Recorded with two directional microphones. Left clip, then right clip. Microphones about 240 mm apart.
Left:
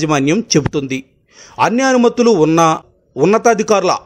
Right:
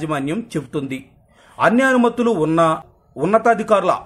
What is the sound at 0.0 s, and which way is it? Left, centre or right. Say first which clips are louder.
A man's voice: left 8 dB; left.